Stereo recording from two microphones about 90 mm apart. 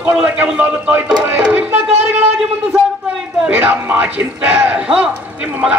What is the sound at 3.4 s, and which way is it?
A man's voice, 15° right (ahead or behind).